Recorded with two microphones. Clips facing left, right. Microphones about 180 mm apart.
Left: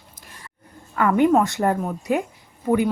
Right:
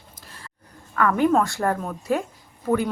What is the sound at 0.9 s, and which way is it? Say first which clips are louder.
A woman's voice: left 2 dB; 20° left (ahead or behind).